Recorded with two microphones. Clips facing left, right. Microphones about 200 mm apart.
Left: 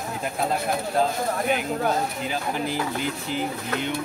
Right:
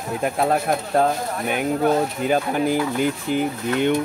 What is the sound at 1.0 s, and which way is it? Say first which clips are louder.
Speech: right 4 dB; 60° right (ahead or behind).